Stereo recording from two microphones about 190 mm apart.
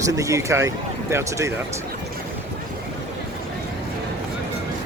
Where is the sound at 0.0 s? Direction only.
15° right (ahead or behind).